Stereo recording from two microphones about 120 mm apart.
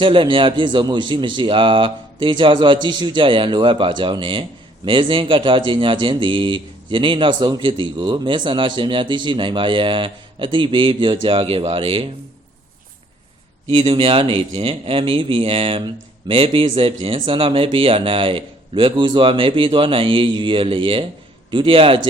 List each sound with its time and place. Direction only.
0.0 s speech: 45° right (ahead or behind)
13.7 s speech: 45° right (ahead or behind)